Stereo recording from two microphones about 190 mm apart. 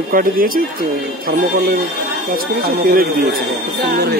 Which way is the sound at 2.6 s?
55° right (ahead or behind).